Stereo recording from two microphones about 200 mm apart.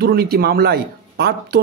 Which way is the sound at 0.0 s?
50° right (ahead or behind).